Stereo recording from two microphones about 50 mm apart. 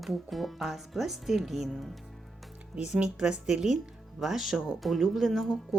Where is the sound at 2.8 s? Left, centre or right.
Centre.